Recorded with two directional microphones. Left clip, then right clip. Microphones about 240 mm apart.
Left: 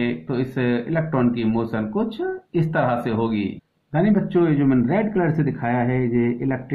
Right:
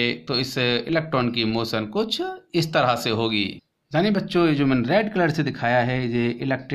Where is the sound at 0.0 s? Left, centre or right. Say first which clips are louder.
Right 1 dB; right.